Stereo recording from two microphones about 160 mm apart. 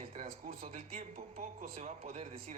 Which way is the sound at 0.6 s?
40° right (ahead or behind).